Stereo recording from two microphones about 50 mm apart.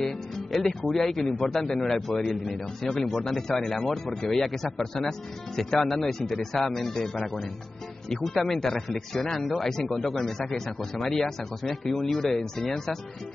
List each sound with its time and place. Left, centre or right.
0.0 s a man's voice: centre